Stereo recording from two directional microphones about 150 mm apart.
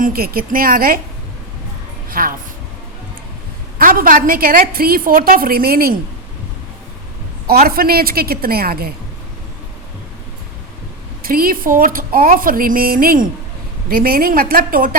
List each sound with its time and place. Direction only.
0.0 s a woman's voice: 75° right (ahead or behind)
2.0 s a woman's voice: 70° right (ahead or behind)
3.8 s a woman's voice: 70° right (ahead or behind); by 6.0 s 85° right
7.4 s a woman's voice: 90° right
11.2 s a woman's voice: 75° right (ahead or behind)